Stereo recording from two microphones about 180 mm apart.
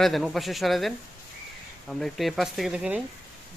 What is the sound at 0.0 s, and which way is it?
Speech, centre (ahead or behind).